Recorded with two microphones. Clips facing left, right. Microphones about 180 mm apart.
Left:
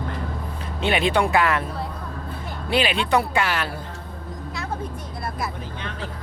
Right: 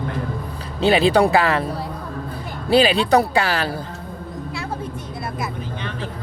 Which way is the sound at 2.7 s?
35° right (ahead or behind).